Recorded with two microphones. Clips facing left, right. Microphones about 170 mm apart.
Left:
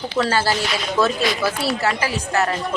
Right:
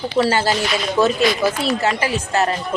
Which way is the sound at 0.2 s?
15° right (ahead or behind).